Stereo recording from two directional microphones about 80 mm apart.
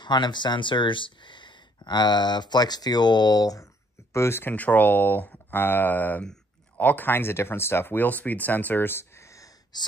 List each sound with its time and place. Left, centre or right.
0.0 s speech: left
4.1 s speech: left
9.7 s speech: left